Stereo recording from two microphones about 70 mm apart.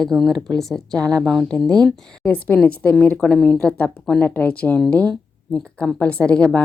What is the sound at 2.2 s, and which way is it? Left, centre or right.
Speech, left.